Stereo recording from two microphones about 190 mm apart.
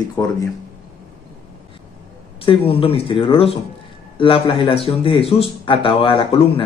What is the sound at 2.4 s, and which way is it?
A man's voice, 30° left (ahead or behind).